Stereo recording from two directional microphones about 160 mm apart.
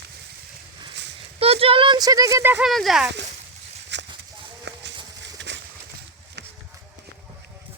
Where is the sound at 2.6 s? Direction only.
Centre (ahead or behind).